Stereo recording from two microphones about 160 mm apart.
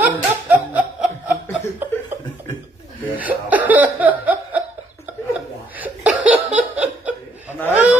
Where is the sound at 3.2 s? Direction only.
10° right (ahead or behind).